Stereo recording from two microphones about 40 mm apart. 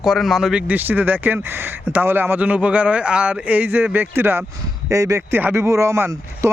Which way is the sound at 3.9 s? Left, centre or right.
Right.